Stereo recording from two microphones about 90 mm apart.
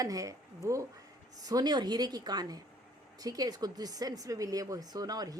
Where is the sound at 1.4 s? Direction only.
50° right (ahead or behind).